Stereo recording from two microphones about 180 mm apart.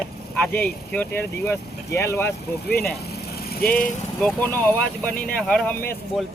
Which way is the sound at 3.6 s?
50° left (ahead or behind).